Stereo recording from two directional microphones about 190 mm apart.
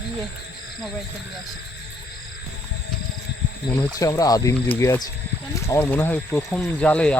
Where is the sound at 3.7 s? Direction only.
20° left (ahead or behind).